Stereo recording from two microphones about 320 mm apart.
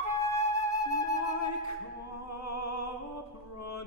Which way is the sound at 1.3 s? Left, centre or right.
Left.